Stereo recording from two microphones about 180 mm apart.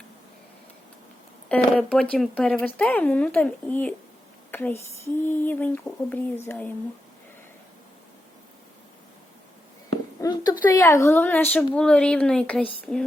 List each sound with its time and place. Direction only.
1.5 s speech: 5° left (ahead or behind)
10.2 s a sound: 20° left (ahead or behind)
10.7 s speech: 15° left (ahead or behind)